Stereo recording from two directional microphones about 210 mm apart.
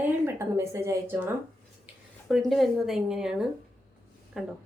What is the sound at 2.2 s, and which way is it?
A woman's voice, centre (ahead or behind).